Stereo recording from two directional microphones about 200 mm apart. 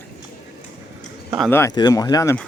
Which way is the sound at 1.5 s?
15° left (ahead or behind).